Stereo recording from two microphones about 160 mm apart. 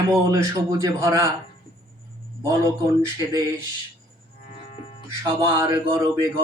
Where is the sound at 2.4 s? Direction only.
25° right (ahead or behind).